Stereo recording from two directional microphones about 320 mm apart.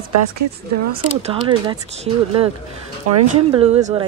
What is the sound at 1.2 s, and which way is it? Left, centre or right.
Speech, centre.